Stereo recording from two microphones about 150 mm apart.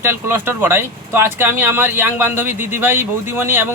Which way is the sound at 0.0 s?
15° right (ahead or behind).